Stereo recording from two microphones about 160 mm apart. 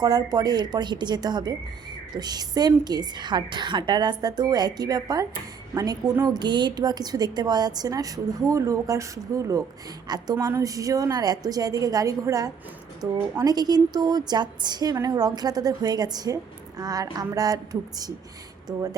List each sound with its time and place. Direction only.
0.0 s a woman's voice: 25° right (ahead or behind)